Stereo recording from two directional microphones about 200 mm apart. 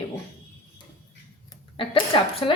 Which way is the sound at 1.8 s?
25° left (ahead or behind).